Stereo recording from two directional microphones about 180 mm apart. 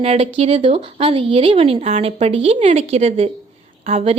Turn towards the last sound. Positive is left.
turn(degrees=-35)  # may be behind; listen again after turning